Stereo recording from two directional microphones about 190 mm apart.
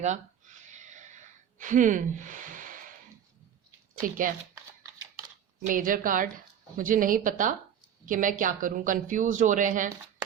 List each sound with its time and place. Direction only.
0.0 s a sound: 40° right (ahead or behind)
4.0 s speech: 45° right (ahead or behind)
5.6 s speech: 45° right (ahead or behind)